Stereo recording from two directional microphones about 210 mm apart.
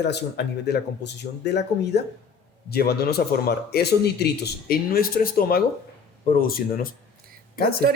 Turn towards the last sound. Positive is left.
turn(degrees=45)  # may be behind; listen again after turning